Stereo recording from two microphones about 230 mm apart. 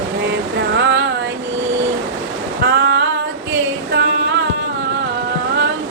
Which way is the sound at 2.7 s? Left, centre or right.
Right.